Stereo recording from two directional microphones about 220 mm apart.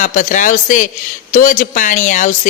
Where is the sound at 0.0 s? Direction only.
35° left (ahead or behind).